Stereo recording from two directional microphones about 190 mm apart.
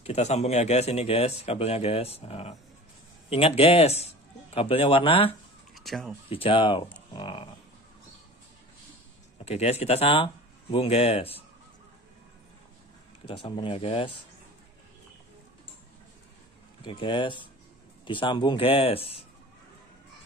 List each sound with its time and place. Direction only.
0.0 s speech: 35° left (ahead or behind)
5.8 s speech: centre (ahead or behind)
6.2 s speech: 30° left (ahead or behind)
9.4 s speech: 35° left (ahead or behind)
13.2 s speech: 30° left (ahead or behind)
16.8 s speech: 25° left (ahead or behind)